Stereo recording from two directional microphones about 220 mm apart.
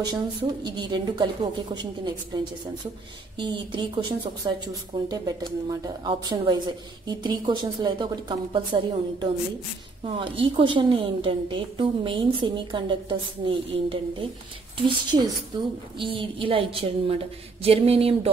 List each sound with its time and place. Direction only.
0.0 s speech: 20° right (ahead or behind)